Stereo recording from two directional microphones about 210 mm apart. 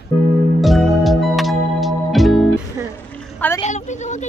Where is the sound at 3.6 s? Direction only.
35° left (ahead or behind).